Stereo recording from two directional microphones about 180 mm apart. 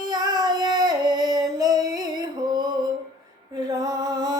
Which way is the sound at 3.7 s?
20° right (ahead or behind).